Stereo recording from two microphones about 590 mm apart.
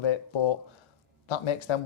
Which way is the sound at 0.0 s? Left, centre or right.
Left.